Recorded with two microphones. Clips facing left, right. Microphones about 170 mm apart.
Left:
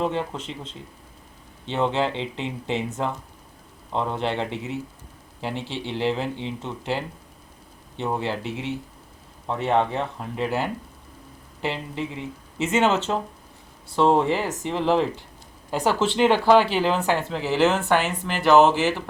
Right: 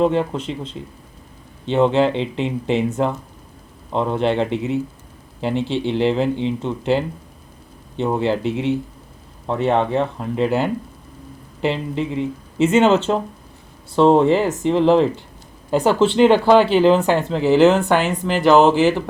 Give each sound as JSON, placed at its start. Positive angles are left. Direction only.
{"t": 0.0, "sound": "speech", "side_deg": -65}